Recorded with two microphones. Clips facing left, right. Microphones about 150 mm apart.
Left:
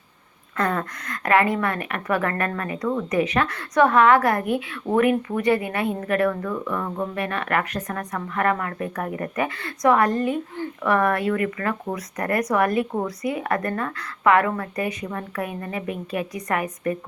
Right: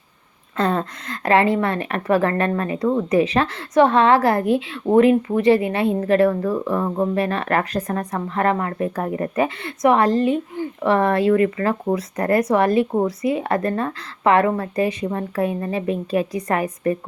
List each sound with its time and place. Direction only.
0.5 s speech: 25° right (ahead or behind)